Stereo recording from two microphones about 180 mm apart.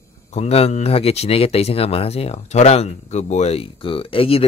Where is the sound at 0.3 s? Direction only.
35° left (ahead or behind).